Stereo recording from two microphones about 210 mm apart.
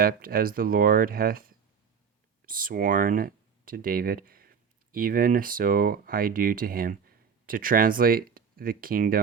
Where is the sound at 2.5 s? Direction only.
40° right (ahead or behind).